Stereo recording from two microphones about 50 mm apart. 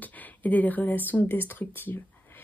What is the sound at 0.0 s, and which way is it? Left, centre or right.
Speech, left.